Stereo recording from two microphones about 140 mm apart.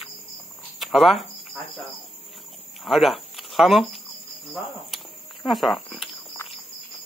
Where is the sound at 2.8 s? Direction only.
Centre (ahead or behind).